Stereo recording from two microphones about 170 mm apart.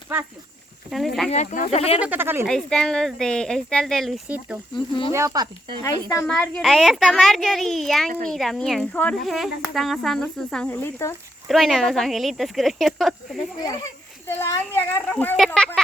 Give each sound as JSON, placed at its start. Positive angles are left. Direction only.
{"t": 0.9, "sound": "speech", "side_deg": 0}
{"t": 1.3, "sound": "speech", "side_deg": 45}
{"t": 2.0, "sound": "speech", "side_deg": -10}
{"t": 2.5, "sound": "speech", "side_deg": 5}
{"t": 4.3, "sound": "speech", "side_deg": -10}
{"t": 5.1, "sound": "speech", "side_deg": -20}
{"t": 5.8, "sound": "speech", "side_deg": 20}
{"t": 6.2, "sound": "speech", "side_deg": 5}
{"t": 11.4, "sound": "speech", "side_deg": 0}
{"t": 14.3, "sound": "speech", "side_deg": 15}